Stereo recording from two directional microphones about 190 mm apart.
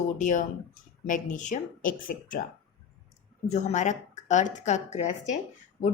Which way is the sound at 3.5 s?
40° left (ahead or behind).